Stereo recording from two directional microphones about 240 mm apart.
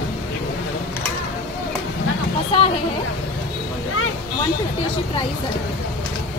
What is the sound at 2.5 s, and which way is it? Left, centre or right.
Speech, left.